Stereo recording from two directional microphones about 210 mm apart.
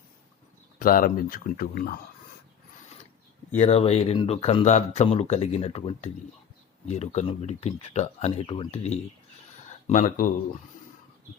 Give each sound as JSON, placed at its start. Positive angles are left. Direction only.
{"t": 0.8, "sound": "speech", "side_deg": 40}
{"t": 3.5, "sound": "speech", "side_deg": 30}